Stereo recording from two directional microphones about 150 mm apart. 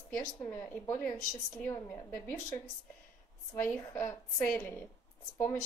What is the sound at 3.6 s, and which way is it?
A woman's voice, 20° left (ahead or behind).